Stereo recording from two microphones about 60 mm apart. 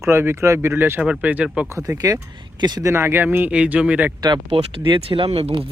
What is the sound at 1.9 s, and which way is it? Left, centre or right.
Speech, right.